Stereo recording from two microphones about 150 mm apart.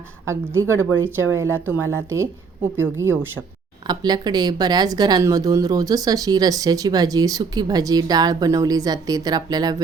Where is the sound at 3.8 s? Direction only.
30° right (ahead or behind).